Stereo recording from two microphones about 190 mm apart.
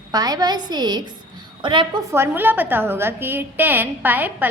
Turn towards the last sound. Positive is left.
turn(degrees=-10)  # may be behind; listen again after turning